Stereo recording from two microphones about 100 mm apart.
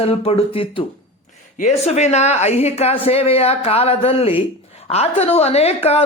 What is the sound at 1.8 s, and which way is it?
A woman's voice, 90° left.